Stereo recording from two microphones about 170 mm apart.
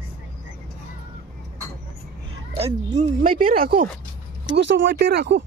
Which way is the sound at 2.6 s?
40° right (ahead or behind).